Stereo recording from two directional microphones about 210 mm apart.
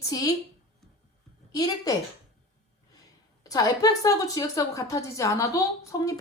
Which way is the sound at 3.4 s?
15° left (ahead or behind).